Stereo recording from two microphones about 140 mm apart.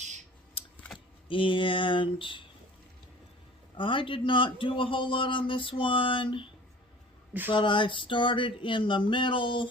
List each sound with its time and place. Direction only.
0.9 s speech: 40° left (ahead or behind)
3.8 s speech: 35° left (ahead or behind)
7.5 s speech: 35° left (ahead or behind)